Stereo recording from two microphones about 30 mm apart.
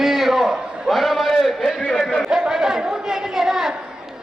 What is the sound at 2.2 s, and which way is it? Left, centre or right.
A man's voice, right.